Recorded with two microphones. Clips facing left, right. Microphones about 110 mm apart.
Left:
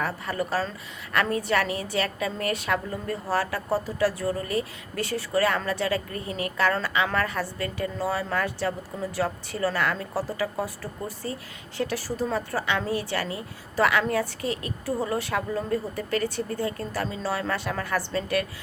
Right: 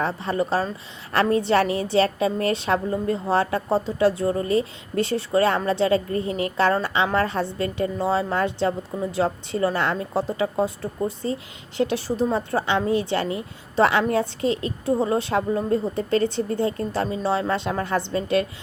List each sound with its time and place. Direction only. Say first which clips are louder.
0.0 s a woman's voice: right 5 dB; 25° right (ahead or behind)